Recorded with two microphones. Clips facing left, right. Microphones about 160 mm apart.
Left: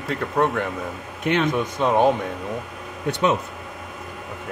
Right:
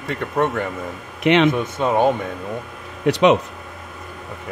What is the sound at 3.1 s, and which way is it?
Speech, 85° right.